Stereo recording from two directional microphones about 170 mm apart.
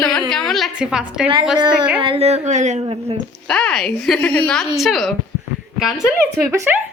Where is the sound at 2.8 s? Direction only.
35° right (ahead or behind).